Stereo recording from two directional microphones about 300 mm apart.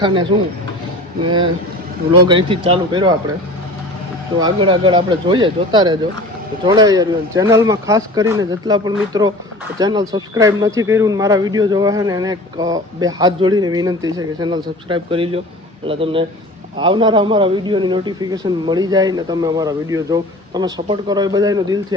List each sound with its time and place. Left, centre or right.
0.0 s speech: centre
4.6 s speech: centre